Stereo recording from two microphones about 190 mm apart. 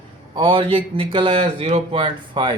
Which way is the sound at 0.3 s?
25° right (ahead or behind).